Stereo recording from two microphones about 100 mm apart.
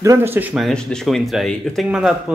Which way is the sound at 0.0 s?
30° right (ahead or behind).